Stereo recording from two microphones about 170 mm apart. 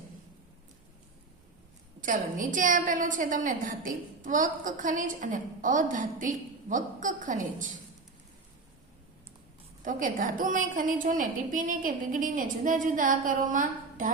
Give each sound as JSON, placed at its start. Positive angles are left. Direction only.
{"t": 2.0, "sound": "a woman's voice", "side_deg": -50}
{"t": 9.8, "sound": "a woman's voice", "side_deg": -50}